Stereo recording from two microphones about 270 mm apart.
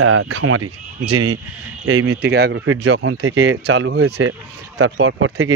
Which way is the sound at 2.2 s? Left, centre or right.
Right.